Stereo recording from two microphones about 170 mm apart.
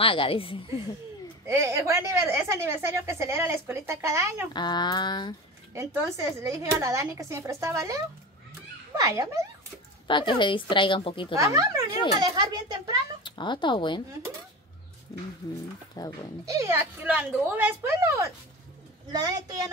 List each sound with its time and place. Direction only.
0.0 s a woman's voice: 30° left (ahead or behind)
1.5 s a woman's voice: 15° right (ahead or behind)
4.6 s a woman's voice: 25° left (ahead or behind)
5.8 s a woman's voice: 15° right (ahead or behind)
10.0 s a woman's voice: 30° left (ahead or behind)
11.3 s speech: 20° right (ahead or behind)
13.2 s a woman's voice: 25° left (ahead or behind)
16.0 s a woman's voice: 20° left (ahead or behind)
16.4 s a woman's voice: 20° right (ahead or behind)